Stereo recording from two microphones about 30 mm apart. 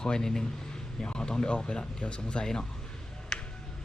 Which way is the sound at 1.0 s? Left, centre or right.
Left.